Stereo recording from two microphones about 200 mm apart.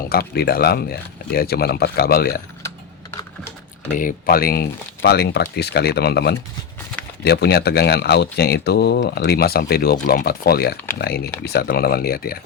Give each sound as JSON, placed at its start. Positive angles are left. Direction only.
{"t": 0.1, "sound": "speech", "side_deg": 50}
{"t": 3.9, "sound": "speech", "side_deg": 45}